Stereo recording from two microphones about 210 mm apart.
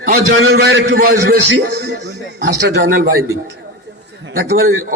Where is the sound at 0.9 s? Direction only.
45° right (ahead or behind).